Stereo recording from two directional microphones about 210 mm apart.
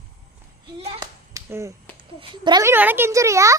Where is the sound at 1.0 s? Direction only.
10° right (ahead or behind).